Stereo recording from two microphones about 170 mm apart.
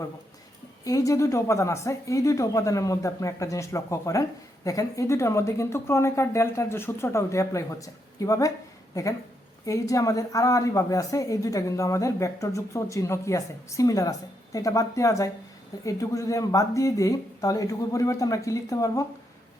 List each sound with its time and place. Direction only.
0.9 s a woman's voice: 20° left (ahead or behind)